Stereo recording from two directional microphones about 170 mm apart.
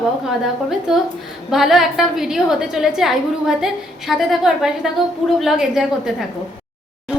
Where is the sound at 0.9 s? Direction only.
Centre (ahead or behind).